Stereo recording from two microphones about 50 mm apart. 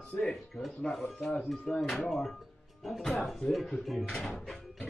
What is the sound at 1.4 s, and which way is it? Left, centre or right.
Speech, centre.